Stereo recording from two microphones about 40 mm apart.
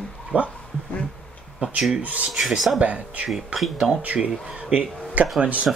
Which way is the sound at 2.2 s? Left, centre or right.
Centre.